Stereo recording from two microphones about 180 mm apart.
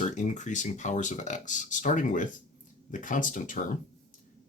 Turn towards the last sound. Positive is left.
turn(degrees=45)  # may be behind; listen again after turning